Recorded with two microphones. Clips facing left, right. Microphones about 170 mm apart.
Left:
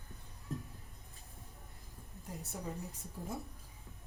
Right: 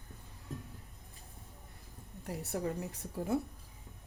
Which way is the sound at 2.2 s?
75° right (ahead or behind).